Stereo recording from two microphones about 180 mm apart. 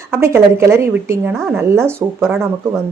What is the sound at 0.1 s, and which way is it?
A woman's voice, 15° right (ahead or behind).